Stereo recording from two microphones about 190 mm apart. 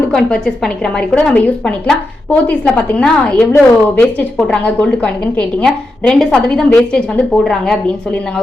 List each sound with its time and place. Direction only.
0.1 s a woman's voice: 5° left (ahead or behind)